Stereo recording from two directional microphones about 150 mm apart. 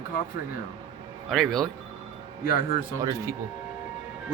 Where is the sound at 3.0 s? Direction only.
20° right (ahead or behind).